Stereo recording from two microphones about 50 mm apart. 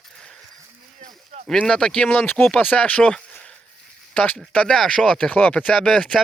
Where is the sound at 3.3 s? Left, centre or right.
Left.